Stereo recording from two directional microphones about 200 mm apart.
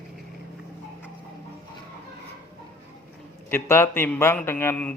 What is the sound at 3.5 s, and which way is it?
Speech, 10° left (ahead or behind).